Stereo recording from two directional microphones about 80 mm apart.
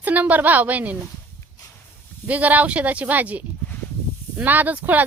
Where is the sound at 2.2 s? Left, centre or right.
Centre.